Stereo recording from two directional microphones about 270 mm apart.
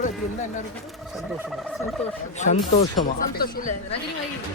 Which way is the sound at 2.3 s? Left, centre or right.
Left.